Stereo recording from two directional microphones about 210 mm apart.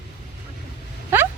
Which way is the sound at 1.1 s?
10° right (ahead or behind).